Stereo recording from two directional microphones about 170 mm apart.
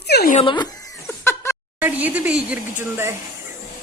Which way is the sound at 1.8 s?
10° right (ahead or behind).